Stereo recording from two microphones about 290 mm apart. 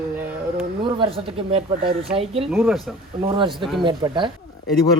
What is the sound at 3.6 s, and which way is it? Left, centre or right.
Speech, centre.